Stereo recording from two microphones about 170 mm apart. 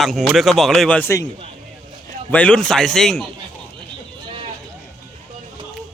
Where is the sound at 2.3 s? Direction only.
5° left (ahead or behind).